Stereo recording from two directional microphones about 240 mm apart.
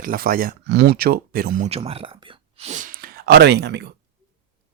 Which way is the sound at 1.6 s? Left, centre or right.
Right.